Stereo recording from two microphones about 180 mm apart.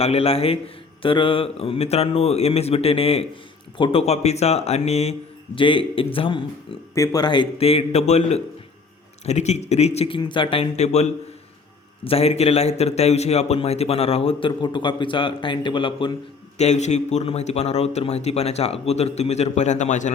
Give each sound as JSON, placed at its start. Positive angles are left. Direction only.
{"t": 0.0, "sound": "a man's voice", "side_deg": 35}
{"t": 6.9, "sound": "a man's voice", "side_deg": 20}
{"t": 16.6, "sound": "a man's voice", "side_deg": 40}